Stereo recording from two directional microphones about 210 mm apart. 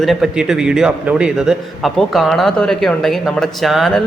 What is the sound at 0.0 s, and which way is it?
A man's voice, centre (ahead or behind).